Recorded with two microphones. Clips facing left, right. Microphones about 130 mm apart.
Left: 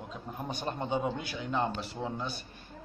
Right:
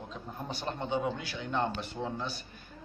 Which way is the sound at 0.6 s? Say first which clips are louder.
Even; 15° left (ahead or behind).